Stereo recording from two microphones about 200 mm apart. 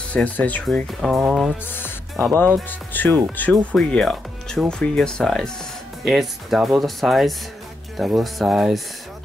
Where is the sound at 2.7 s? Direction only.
10° left (ahead or behind).